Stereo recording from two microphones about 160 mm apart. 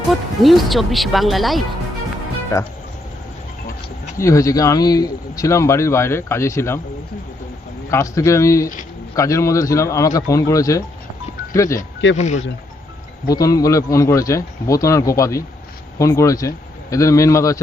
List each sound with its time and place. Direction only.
0.4 s speech: centre (ahead or behind)
2.5 s speech: 20° left (ahead or behind)
4.2 s speech: 20° left (ahead or behind)
7.9 s speech: 20° left (ahead or behind)
11.8 s speech: 50° left (ahead or behind)
13.2 s speech: 20° left (ahead or behind)